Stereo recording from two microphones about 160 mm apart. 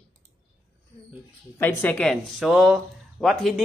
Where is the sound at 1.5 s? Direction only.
10° left (ahead or behind).